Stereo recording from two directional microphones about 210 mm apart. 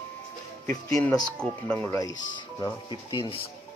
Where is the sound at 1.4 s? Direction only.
10° left (ahead or behind).